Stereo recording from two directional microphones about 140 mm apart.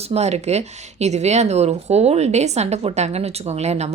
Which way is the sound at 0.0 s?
50° right (ahead or behind).